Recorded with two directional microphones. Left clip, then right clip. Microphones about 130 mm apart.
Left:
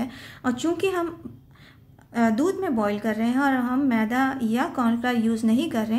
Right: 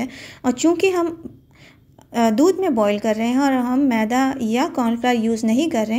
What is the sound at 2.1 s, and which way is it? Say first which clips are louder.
A woman's voice: right 7 dB; 55° right (ahead or behind).